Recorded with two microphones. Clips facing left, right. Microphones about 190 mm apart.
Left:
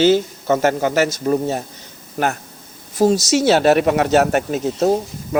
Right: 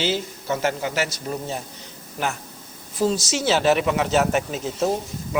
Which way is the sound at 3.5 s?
60° left (ahead or behind).